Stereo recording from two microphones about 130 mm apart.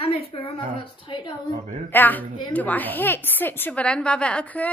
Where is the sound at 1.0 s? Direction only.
40° left (ahead or behind).